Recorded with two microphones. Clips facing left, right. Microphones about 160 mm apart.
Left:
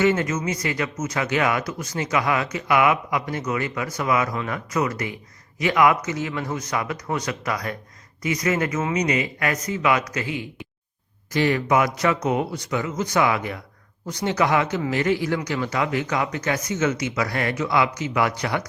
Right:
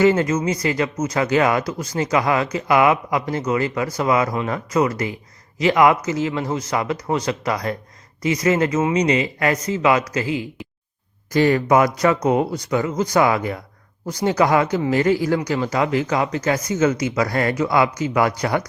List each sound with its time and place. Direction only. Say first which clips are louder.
0.0 s speech: right 4 dB; 35° right (ahead or behind)
11.3 s speech: right 4 dB; 40° right (ahead or behind)